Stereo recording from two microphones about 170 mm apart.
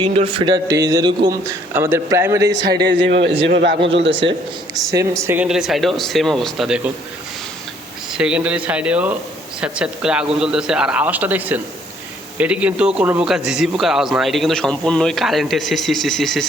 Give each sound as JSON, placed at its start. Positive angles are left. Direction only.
{"t": 0.2, "sound": "a man's voice", "side_deg": -30}
{"t": 2.5, "sound": "speech", "side_deg": -90}
{"t": 3.4, "sound": "speech", "side_deg": -80}
{"t": 3.8, "sound": "speech", "side_deg": -90}
{"t": 5.2, "sound": "a man's voice", "side_deg": -10}
{"t": 8.2, "sound": "a man's voice", "side_deg": -5}